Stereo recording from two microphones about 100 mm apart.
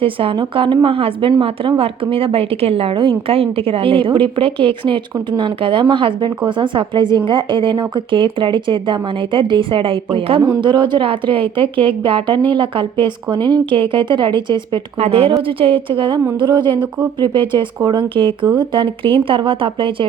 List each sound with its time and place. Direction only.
0.0 s speech: 65° right (ahead or behind)
0.9 s a woman's voice: 65° right (ahead or behind)
10.6 s speech: 50° right (ahead or behind)
14.9 s speech: 80° right; by 20.1 s 60° right (ahead or behind)